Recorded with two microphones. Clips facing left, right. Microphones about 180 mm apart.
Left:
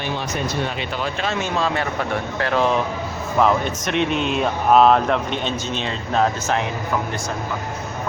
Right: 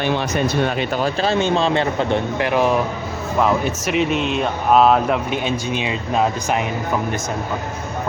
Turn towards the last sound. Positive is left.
turn(degrees=-10)  # may be behind; listen again after turning